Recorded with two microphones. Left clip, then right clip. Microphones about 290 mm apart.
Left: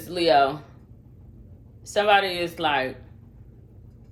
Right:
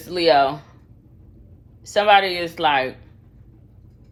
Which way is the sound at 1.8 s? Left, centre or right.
Right.